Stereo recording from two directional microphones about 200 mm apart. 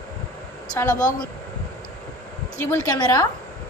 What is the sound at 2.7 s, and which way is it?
Speech, 20° left (ahead or behind).